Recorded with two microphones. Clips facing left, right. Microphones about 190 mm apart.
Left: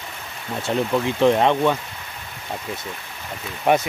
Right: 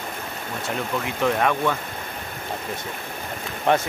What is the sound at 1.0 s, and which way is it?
Speech, 25° left (ahead or behind).